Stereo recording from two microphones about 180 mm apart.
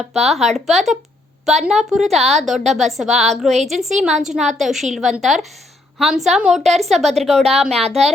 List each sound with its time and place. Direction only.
0.0 s a woman's voice: centre (ahead or behind)
7.8 s speech: 35° right (ahead or behind)